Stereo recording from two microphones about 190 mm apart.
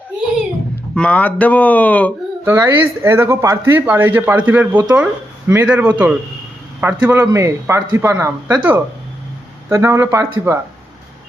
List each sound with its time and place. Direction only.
0.9 s speech: 5° left (ahead or behind)
2.4 s speech: 10° right (ahead or behind)